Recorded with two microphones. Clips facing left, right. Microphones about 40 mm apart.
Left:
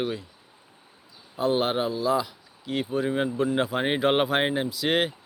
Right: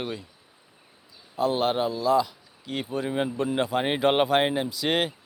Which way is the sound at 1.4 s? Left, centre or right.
Centre.